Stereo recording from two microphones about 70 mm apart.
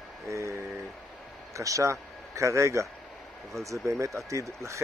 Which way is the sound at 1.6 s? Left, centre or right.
Right.